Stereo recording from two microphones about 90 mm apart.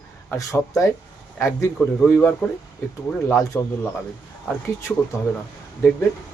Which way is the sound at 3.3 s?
35° left (ahead or behind).